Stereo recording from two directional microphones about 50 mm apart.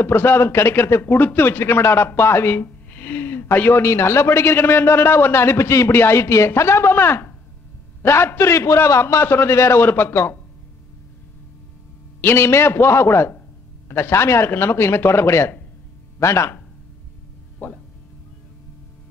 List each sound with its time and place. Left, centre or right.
0.0 s speech: left
1.0 s speech: left
2.6 s a sound: left
3.7 s a man's voice: left
5.9 s a man's voice: left
9.8 s speech: left
12.4 s a man's voice: left
16.2 s speech: left
17.6 s speech: left